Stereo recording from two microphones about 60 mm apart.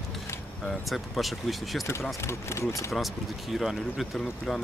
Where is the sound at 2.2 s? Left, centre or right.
Left.